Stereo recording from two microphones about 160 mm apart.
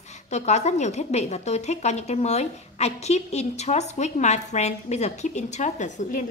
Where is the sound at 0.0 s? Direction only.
45° left (ahead or behind).